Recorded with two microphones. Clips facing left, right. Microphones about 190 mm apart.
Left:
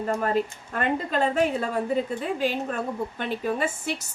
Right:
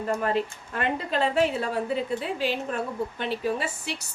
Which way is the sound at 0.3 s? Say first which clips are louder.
Left 1 dB; 45° left (ahead or behind).